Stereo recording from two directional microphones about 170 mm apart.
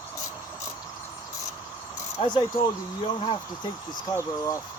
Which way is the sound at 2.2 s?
30° left (ahead or behind).